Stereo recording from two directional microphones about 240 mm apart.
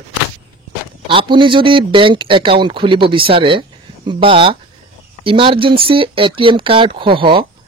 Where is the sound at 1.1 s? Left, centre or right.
Right.